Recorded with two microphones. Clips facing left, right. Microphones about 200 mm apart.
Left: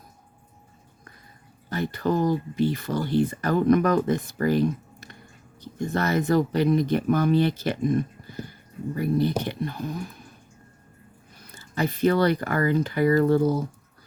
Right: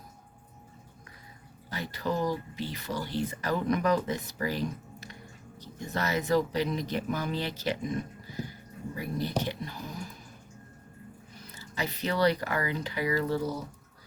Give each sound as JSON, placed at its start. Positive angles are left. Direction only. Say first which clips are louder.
{"t": 1.7, "sound": "speech", "louder": "left 7 dB", "side_deg": 50}
{"t": 11.5, "sound": "speech", "louder": "left 8 dB", "side_deg": 50}